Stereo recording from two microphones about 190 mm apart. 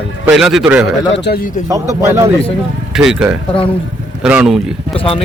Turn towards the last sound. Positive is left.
turn(degrees=30)  # may be behind; listen again after turning